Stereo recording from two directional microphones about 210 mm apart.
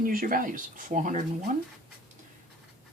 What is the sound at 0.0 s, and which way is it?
Speech, 40° right (ahead or behind).